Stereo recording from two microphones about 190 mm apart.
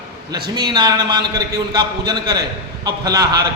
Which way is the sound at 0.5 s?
20° right (ahead or behind).